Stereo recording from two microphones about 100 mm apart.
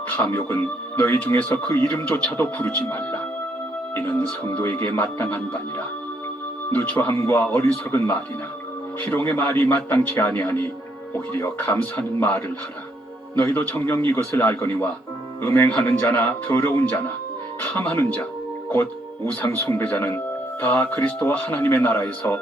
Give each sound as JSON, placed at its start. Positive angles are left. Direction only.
{"t": 0.3, "sound": "speech", "side_deg": 25}